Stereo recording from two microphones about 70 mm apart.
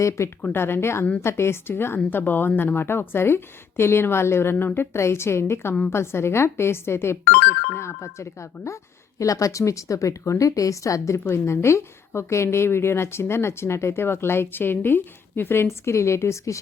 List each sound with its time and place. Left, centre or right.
0.2 s a woman's voice: left
11.2 s a woman's voice: left